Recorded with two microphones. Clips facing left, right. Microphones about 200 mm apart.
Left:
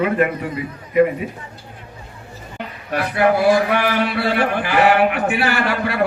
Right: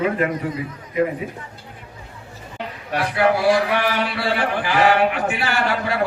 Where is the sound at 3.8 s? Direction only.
60° left (ahead or behind).